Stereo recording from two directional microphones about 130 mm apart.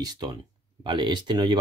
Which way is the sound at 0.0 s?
30° right (ahead or behind).